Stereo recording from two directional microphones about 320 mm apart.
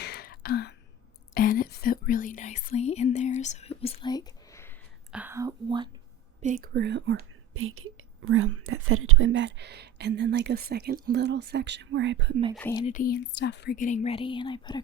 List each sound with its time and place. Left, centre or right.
0.0 s a sound: left
1.3 s speech: left; by 4.8 s centre
5.1 s speech: centre
6.4 s speech: right
12.5 s speech: centre
12.8 s speech: left